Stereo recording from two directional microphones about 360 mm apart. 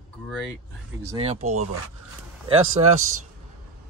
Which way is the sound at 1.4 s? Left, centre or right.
Right.